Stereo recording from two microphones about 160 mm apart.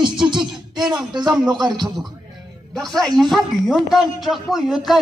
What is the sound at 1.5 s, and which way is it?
Speech, 30° right (ahead or behind).